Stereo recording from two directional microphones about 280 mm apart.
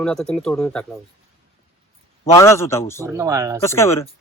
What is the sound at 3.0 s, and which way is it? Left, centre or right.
Speech, centre.